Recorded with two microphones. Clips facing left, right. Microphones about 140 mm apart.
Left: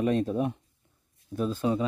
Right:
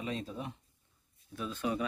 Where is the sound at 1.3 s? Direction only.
35° left (ahead or behind).